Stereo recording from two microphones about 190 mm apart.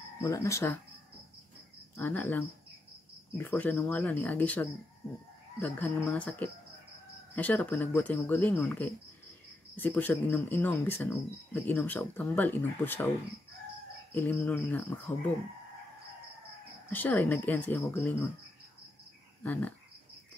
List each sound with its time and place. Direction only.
0.2 s speech: 15° left (ahead or behind)
2.0 s speech: 10° left (ahead or behind)
14.1 s speech: 10° left (ahead or behind)
16.9 s speech: 10° left (ahead or behind)
19.4 s speech: 10° left (ahead or behind)